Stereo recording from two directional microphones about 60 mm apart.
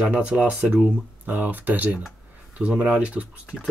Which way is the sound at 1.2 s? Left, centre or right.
Right.